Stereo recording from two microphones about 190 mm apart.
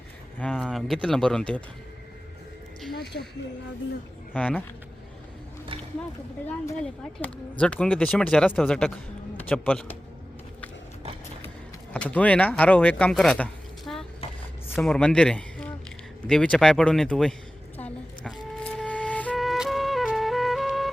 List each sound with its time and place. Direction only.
0.3 s speech: centre (ahead or behind)
2.9 s a sound: 60° left (ahead or behind)
4.4 s speech: 5° left (ahead or behind)
7.6 s a man's voice: 5° left (ahead or behind)
11.9 s speech: 5° left (ahead or behind)
17.7 s flute: 5° left (ahead or behind)